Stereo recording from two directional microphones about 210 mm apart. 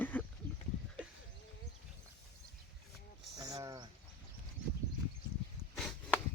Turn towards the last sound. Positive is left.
turn(degrees=5)  # may be behind; listen again after turning